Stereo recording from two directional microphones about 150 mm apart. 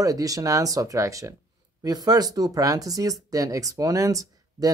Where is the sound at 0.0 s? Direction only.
25° right (ahead or behind).